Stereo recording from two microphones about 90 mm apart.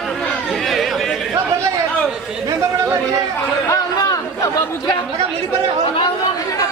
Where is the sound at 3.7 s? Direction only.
40° left (ahead or behind).